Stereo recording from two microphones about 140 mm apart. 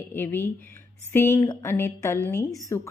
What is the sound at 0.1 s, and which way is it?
A woman's voice, 15° left (ahead or behind).